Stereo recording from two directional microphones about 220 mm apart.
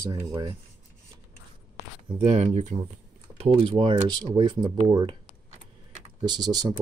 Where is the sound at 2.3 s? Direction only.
30° right (ahead or behind).